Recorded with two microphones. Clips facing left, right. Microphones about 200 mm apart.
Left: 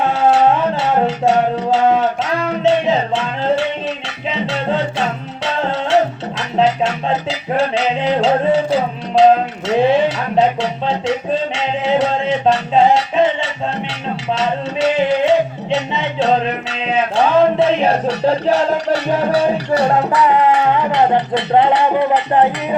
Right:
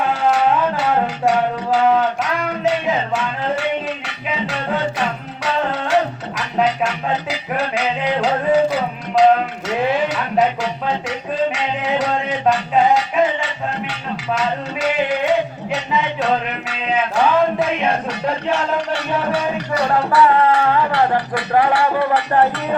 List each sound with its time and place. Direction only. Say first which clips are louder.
0.0 s music: left 4 dB; 25° left (ahead or behind)
6.6 s music: left 3 dB; 25° left (ahead or behind)
9.6 s a sound: left 6 dB; 25° left (ahead or behind)
14.3 s music: left 3 dB; 25° left (ahead or behind)